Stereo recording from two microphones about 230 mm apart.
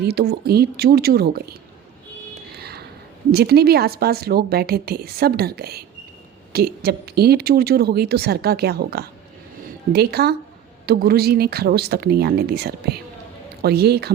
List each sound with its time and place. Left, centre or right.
0.0 s a woman's voice: right
2.5 s a sound: right
3.3 s a woman's voice: right